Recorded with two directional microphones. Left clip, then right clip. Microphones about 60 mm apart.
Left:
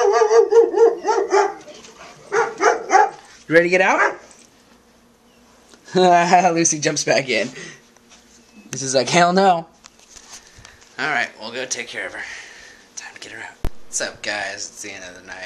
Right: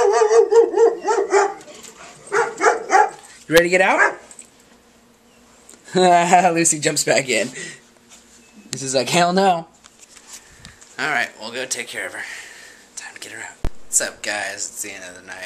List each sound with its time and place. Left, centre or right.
0.1 s dog: centre
6.0 s speech: centre
7.5 s speech: right
8.7 s speech: left
11.0 s speech: centre